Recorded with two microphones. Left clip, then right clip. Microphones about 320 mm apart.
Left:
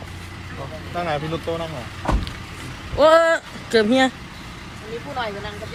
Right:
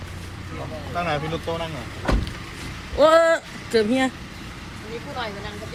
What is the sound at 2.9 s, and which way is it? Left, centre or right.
Speech, centre.